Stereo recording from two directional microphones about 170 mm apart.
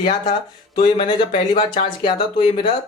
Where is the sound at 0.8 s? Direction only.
30° left (ahead or behind).